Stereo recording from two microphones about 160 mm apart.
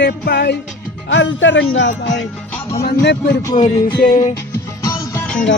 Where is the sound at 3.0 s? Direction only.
90° left.